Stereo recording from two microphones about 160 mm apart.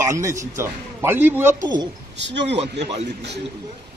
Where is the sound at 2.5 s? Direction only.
40° right (ahead or behind).